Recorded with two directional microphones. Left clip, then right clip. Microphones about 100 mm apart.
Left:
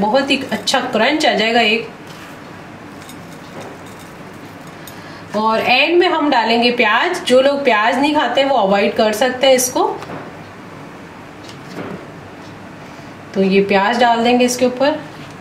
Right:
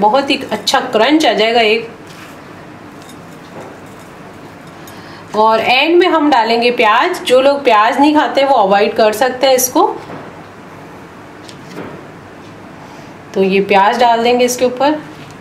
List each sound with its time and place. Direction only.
0.1 s a woman's voice: 30° right (ahead or behind)
5.4 s a woman's voice: 30° right (ahead or behind)
13.3 s a woman's voice: 35° right (ahead or behind)